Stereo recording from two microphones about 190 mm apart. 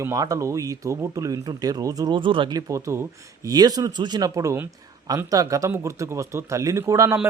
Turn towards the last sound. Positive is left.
turn(degrees=-15)  # may be behind; listen again after turning